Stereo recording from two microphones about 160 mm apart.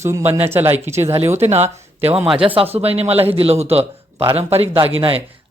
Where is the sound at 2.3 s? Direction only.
35° right (ahead or behind).